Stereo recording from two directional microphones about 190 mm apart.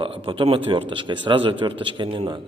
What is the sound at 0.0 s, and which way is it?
A man's voice, 25° right (ahead or behind).